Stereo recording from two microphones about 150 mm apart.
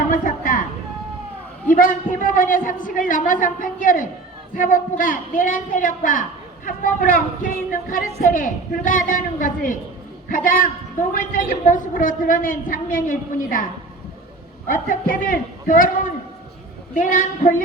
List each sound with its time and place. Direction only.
0.1 s a sound: 65° left (ahead or behind)
1.7 s a woman's voice: 65° left (ahead or behind)
14.7 s a woman's voice: 65° left (ahead or behind)